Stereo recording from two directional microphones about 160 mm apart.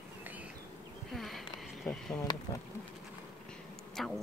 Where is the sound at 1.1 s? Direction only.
Centre (ahead or behind).